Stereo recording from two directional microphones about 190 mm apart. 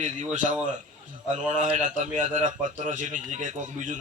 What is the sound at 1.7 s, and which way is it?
A man's voice, 40° right (ahead or behind).